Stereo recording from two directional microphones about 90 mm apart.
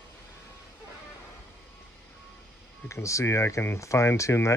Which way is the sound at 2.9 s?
35° left (ahead or behind).